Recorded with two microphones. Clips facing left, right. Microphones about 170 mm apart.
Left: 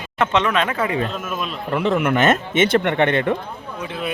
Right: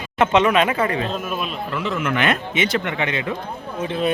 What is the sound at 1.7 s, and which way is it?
Speech, 55° left (ahead or behind).